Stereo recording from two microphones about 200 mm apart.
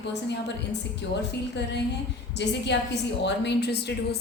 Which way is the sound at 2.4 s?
60° left (ahead or behind).